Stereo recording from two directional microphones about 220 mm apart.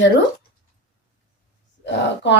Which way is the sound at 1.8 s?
55° left (ahead or behind).